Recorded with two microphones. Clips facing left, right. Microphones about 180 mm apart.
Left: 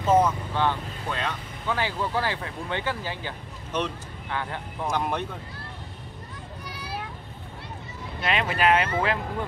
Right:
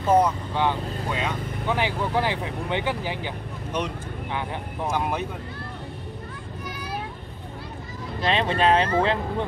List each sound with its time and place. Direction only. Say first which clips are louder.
0.2 s speech: right 1 dB; 15° right (ahead or behind)
8.2 s speech: right 3 dB; 30° right (ahead or behind)